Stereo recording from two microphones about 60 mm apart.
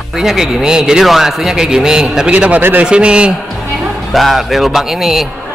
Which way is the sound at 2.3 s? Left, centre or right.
Right.